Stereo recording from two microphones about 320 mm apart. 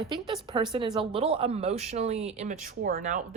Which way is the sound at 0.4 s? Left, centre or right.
Centre.